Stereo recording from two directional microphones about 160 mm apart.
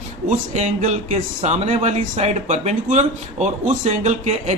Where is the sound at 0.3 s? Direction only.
50° right (ahead or behind).